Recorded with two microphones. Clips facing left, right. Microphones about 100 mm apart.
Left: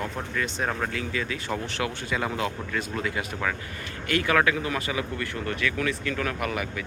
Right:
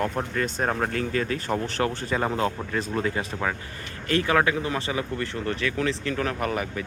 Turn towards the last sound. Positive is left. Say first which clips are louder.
# right 2 dB
turn(degrees=-35)  # may be behind; listen again after turning